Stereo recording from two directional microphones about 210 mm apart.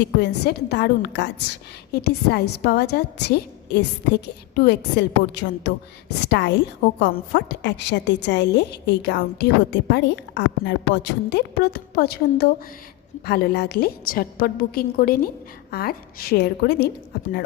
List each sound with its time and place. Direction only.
0.0 s a woman's voice: 55° left (ahead or behind)